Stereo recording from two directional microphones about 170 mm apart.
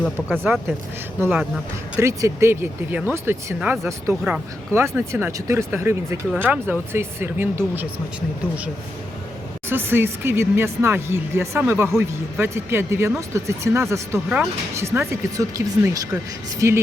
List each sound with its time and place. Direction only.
0.0 s speech: 5° right (ahead or behind)
9.6 s speech: 15° right (ahead or behind)